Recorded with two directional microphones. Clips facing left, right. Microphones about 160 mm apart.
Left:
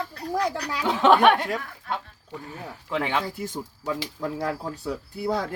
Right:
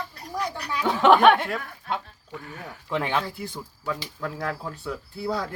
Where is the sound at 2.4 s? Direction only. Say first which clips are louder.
Left 1 dB; 30° left (ahead or behind).